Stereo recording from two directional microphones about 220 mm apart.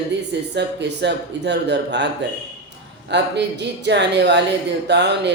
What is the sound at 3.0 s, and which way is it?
Speech, 50° right (ahead or behind).